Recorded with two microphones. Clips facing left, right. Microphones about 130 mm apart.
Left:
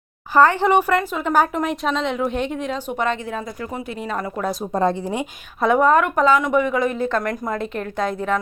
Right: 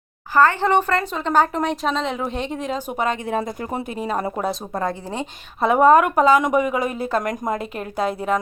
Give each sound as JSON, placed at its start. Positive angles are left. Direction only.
{"t": 0.3, "sound": "speech", "side_deg": 15}
{"t": 3.6, "sound": "speech", "side_deg": -30}
{"t": 4.7, "sound": "speech", "side_deg": 20}
{"t": 5.5, "sound": "a woman's voice", "side_deg": -5}